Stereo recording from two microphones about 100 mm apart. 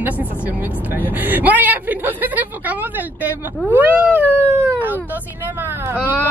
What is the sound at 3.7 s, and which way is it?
Cat, 20° right (ahead or behind).